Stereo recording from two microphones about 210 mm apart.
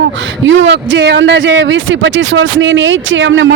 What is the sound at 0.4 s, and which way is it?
Speech, 65° right (ahead or behind).